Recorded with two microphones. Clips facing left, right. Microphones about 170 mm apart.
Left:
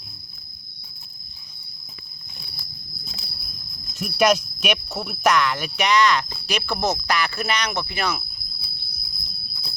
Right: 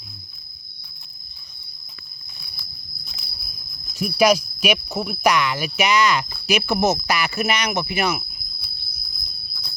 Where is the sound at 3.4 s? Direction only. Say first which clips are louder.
Left 3 dB; centre (ahead or behind).